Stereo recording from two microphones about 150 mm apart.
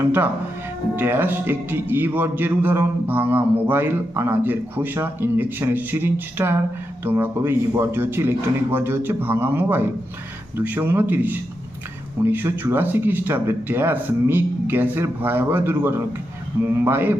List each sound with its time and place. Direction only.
0.9 s a man's voice: 15° right (ahead or behind)